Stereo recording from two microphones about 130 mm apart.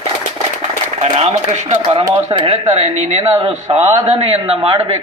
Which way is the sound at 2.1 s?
45° right (ahead or behind).